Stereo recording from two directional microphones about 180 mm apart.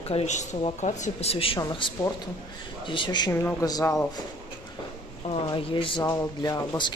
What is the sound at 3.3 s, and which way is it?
Speech, 15° left (ahead or behind).